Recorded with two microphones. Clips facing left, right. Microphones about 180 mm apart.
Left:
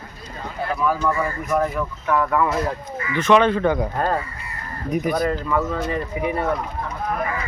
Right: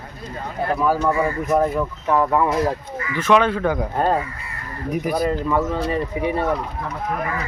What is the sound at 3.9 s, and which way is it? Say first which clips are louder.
Speech: right 3 dB; 20° right (ahead or behind).